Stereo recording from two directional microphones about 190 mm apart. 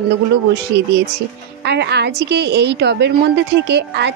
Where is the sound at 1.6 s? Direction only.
60° right (ahead or behind).